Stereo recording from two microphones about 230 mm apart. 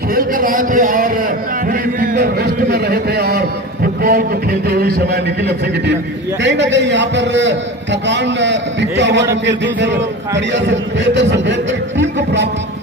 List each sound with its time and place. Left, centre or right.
0.1 s a man's voice: right
2.0 s a sound: right
4.0 s a man's voice: right